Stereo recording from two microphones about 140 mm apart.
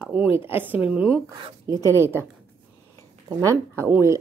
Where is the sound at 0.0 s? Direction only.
10° right (ahead or behind).